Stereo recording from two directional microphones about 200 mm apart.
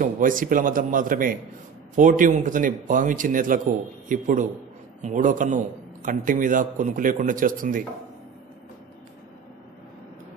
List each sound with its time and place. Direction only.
0.0 s a man's voice: 40° right (ahead or behind)